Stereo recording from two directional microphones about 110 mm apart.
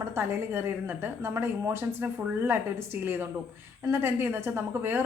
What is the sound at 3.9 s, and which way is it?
A woman's voice, 20° right (ahead or behind).